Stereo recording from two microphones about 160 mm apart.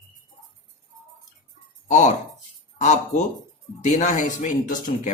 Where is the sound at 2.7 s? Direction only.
50° left (ahead or behind).